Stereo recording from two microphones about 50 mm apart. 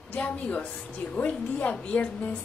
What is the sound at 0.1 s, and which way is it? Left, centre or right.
A woman's voice, left.